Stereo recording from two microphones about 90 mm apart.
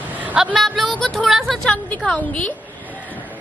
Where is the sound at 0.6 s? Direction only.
Centre (ahead or behind).